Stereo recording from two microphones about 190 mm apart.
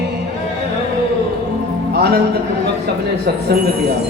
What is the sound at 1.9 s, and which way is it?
Music, 60° right (ahead or behind).